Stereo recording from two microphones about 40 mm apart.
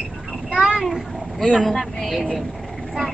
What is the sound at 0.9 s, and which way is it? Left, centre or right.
Boat, centre.